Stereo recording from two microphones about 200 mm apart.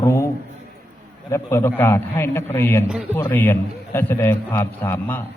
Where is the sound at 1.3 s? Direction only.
15° left (ahead or behind).